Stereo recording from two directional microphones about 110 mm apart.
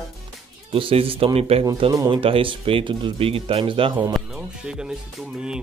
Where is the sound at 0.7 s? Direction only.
55° right (ahead or behind).